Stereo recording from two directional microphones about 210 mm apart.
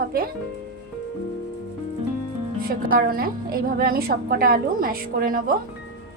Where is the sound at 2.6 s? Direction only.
45° right (ahead or behind).